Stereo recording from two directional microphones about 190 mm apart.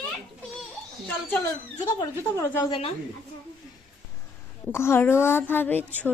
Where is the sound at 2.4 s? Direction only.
15° left (ahead or behind).